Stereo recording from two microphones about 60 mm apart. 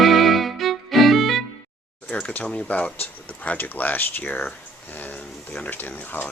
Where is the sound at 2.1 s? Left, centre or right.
Left.